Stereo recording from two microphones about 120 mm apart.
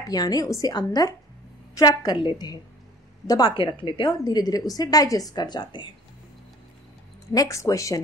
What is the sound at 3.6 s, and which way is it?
Speech, 45° left (ahead or behind).